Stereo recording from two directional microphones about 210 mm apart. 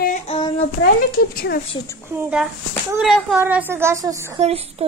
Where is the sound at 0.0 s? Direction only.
35° left (ahead or behind).